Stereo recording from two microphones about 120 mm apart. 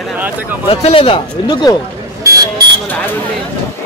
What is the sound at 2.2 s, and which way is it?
Speech, 30° right (ahead or behind).